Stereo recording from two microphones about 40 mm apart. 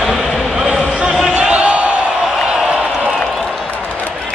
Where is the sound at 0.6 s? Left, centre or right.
Centre.